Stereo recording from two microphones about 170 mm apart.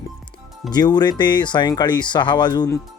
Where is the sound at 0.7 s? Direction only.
25° left (ahead or behind).